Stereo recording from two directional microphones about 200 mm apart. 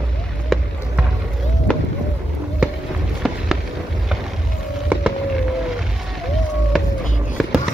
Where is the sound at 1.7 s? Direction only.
5° left (ahead or behind).